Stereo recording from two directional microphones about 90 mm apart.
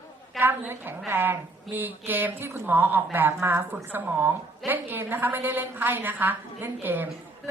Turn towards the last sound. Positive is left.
turn(degrees=-20)  # may be behind; listen again after turning